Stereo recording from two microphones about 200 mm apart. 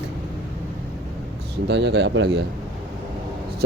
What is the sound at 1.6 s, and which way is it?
Speech, 60° right (ahead or behind).